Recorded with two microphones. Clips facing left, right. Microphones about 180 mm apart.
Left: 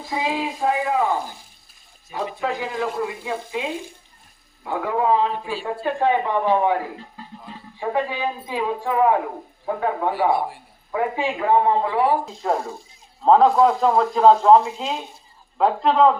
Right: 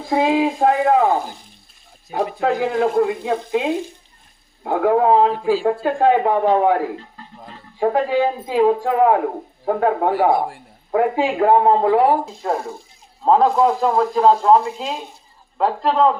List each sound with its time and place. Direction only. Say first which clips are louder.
0.0 s speech: right 8 dB; 55° right (ahead or behind)
7.8 s speech: right 7 dB; 50° right (ahead or behind)
12.4 s speech: right 1 dB; 5° right (ahead or behind)